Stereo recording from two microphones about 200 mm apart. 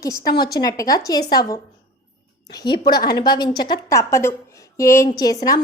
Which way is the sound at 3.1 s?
20° left (ahead or behind).